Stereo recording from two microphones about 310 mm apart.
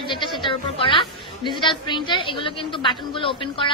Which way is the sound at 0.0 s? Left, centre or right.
Centre.